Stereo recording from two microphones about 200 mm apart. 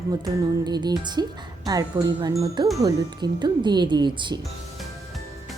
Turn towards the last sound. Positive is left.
turn(degrees=0)  # may be behind; listen again after turning